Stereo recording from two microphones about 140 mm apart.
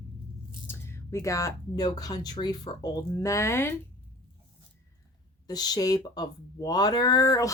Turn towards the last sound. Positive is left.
turn(degrees=25)  # may be behind; listen again after turning